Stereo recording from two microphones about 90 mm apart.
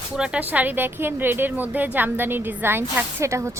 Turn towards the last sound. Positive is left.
turn(degrees=-35)  # may be behind; listen again after turning